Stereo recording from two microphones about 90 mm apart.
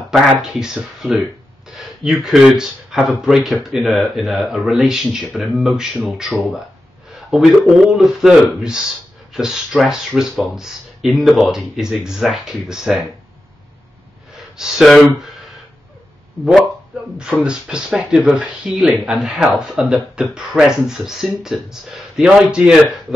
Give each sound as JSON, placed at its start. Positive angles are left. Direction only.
{"t": 0.1, "sound": "speech", "side_deg": -5}
{"t": 14.3, "sound": "gasp", "side_deg": -5}
{"t": 17.2, "sound": "speech", "side_deg": -10}